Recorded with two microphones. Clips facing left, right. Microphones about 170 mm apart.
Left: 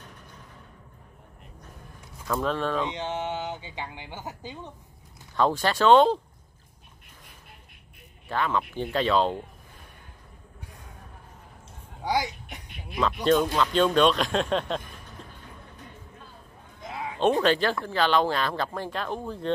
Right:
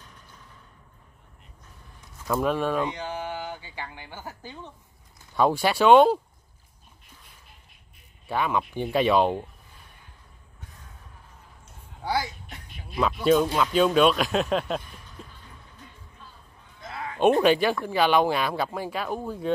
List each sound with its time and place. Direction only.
2.2 s speech: 10° right (ahead or behind)
2.9 s speech: 25° left (ahead or behind)
5.3 s speech: 10° right (ahead or behind)
8.3 s speech: 15° right (ahead or behind)
12.0 s a sound: 15° left (ahead or behind)
12.9 s speech: 5° right (ahead or behind)
15.2 s music: 5° right (ahead or behind)
16.8 s a sound: 15° left (ahead or behind)
17.4 s speech: 15° right (ahead or behind)